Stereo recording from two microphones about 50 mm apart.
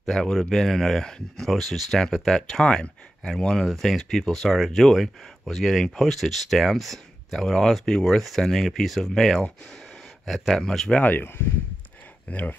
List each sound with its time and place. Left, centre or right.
0.0 s speech: centre
3.6 s speech: centre
10.9 s speech: left
12.3 s speech: left